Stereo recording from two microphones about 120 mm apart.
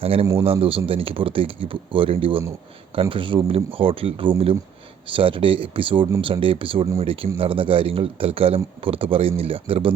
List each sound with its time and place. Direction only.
0.0 s speech: 50° right (ahead or behind)